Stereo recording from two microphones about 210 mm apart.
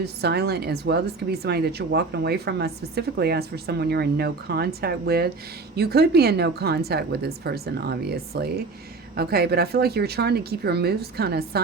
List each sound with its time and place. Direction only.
0.0 s speech: 50° right (ahead or behind)